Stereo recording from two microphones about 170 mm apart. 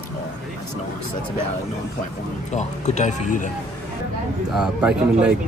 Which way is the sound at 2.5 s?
45° left (ahead or behind).